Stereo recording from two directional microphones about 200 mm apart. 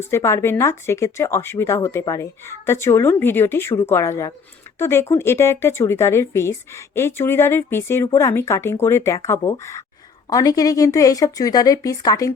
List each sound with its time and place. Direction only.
0.0 s speech: 15° left (ahead or behind)